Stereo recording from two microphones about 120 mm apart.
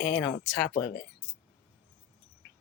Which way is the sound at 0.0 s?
10° left (ahead or behind).